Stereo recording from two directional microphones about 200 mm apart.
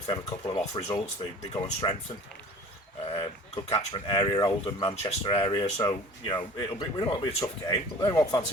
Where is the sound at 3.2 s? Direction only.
25° left (ahead or behind).